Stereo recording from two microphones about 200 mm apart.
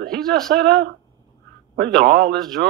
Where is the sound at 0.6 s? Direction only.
55° right (ahead or behind).